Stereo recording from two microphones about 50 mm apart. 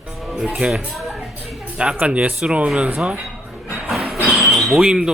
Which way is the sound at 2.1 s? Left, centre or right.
Right.